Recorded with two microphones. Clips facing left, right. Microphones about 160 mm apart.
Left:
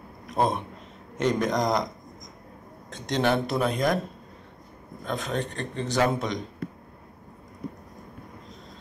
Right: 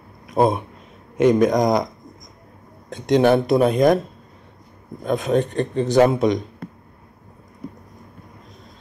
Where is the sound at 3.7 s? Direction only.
25° right (ahead or behind).